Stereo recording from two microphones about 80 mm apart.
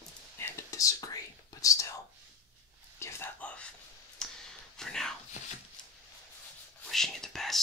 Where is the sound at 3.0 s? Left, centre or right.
Left.